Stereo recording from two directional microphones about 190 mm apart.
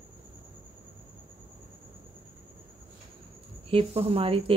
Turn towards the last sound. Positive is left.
turn(degrees=-30)  # may be behind; listen again after turning